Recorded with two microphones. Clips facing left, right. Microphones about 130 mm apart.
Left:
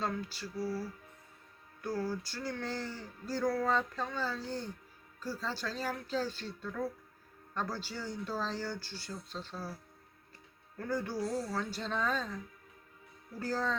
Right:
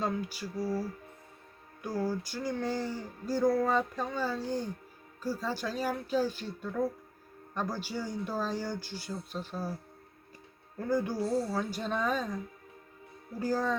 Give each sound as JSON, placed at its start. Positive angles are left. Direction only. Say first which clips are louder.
{"t": 0.0, "sound": "speech", "louder": "right 4 dB", "side_deg": -15}
{"t": 10.8, "sound": "speech", "louder": "right 5 dB", "side_deg": -15}
{"t": 11.2, "sound": "speech", "louder": "right 5 dB", "side_deg": -35}
{"t": 11.5, "sound": "speech", "louder": "right 3 dB", "side_deg": -15}
{"t": 13.4, "sound": "speech", "louder": "right 4 dB", "side_deg": -15}